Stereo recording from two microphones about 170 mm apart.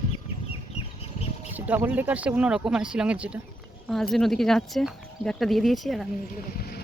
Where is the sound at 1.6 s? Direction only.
10° right (ahead or behind).